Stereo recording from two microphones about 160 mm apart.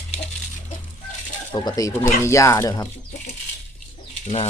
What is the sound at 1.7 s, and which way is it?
Speech, 20° left (ahead or behind).